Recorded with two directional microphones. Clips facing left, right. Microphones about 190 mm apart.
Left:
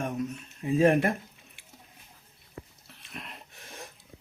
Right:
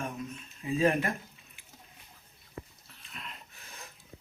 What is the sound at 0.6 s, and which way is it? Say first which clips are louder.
Speech: left 5 dB; 45° left (ahead or behind).